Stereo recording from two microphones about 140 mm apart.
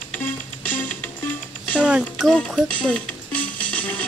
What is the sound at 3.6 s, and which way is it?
Music, 10° left (ahead or behind).